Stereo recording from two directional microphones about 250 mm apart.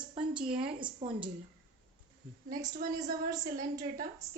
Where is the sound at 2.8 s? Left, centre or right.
Right.